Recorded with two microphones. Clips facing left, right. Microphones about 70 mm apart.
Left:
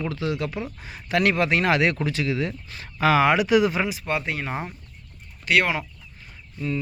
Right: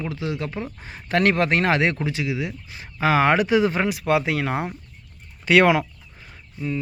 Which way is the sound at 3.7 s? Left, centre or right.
Right.